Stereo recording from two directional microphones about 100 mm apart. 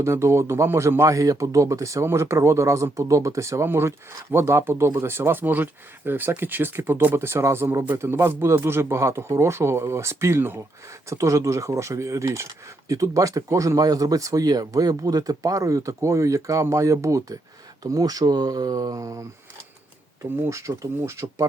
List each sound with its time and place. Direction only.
0.0 s speech: 30° right (ahead or behind)
20.4 s speech: 30° right (ahead or behind)